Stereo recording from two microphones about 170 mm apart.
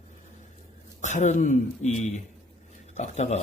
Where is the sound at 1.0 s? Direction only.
45° left (ahead or behind).